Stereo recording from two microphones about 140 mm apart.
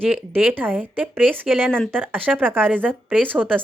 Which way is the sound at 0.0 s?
10° right (ahead or behind).